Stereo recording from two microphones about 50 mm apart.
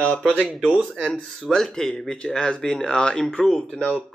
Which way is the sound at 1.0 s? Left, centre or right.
Centre.